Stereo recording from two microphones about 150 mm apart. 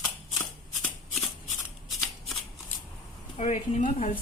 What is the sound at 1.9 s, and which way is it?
Shuffling cards, centre (ahead or behind).